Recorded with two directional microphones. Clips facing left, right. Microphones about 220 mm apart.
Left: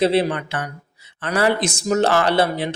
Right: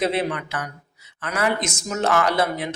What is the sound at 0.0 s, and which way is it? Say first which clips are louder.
A man's voice: left 5 dB; 30° left (ahead or behind).